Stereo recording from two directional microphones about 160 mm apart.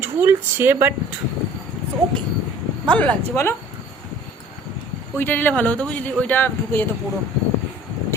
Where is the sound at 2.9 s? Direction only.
10° left (ahead or behind).